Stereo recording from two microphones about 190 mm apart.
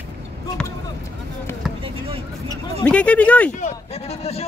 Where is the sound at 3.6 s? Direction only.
35° left (ahead or behind).